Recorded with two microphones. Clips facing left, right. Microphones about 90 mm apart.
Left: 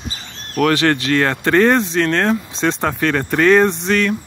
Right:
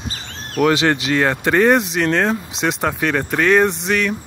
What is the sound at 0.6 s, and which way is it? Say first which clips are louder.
Speech: even; 15° right (ahead or behind).